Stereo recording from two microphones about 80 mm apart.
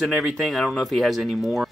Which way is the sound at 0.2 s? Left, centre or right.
Centre.